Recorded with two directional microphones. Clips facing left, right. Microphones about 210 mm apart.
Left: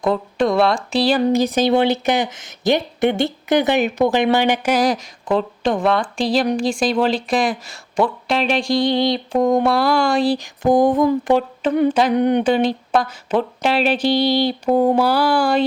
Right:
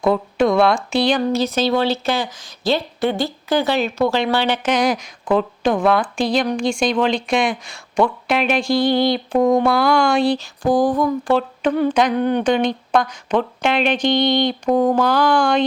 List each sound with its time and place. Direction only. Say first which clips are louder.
0.0 s a woman's voice: right 2 dB; centre (ahead or behind)
10.3 s a sound: left 2 dB; 20° left (ahead or behind)
11.9 s speech: even; 5° left (ahead or behind)
12.1 s a woman's voice: left 2 dB; 15° left (ahead or behind)